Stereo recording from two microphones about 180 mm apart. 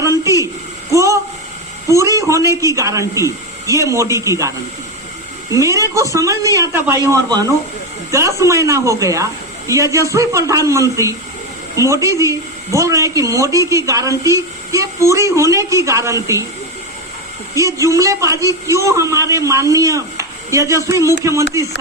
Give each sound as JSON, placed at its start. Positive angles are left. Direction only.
{"t": 0.0, "sound": "a sound", "side_deg": -15}
{"t": 1.9, "sound": "a man's voice", "side_deg": -15}
{"t": 17.5, "sound": "a woman's voice", "side_deg": -15}